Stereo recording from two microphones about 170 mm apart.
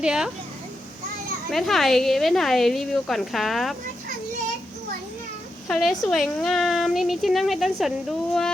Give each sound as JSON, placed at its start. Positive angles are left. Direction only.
{"t": 0.0, "sound": "a woman's voice", "side_deg": -5}
{"t": 1.5, "sound": "a woman's voice", "side_deg": 0}
{"t": 5.6, "sound": "a woman's voice", "side_deg": 5}